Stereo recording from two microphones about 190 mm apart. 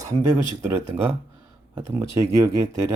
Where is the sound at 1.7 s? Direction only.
15° right (ahead or behind).